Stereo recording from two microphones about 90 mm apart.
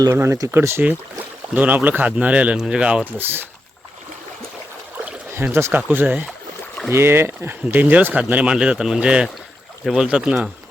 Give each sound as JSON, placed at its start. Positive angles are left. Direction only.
{"t": 0.0, "sound": "speech", "side_deg": -35}
{"t": 1.5, "sound": "speech", "side_deg": -20}
{"t": 3.2, "sound": "speech", "side_deg": -25}
{"t": 5.5, "sound": "speech", "side_deg": -25}